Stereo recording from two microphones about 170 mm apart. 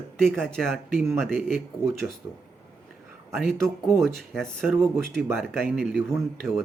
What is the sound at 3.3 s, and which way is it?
Speech, centre (ahead or behind).